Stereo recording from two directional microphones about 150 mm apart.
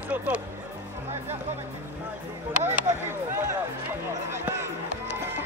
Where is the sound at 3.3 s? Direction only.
15° right (ahead or behind).